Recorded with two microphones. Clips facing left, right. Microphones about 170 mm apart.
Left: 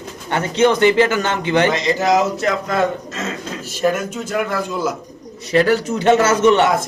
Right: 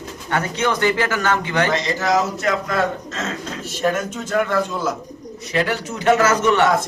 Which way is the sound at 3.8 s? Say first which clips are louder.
Left 3 dB; 10° left (ahead or behind).